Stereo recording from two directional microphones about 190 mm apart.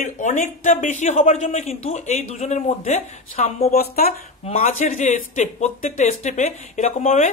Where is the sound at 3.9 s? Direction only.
50° left (ahead or behind).